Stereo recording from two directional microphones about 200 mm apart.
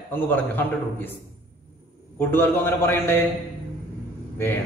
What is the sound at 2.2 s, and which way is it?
A man's voice, 10° left (ahead or behind).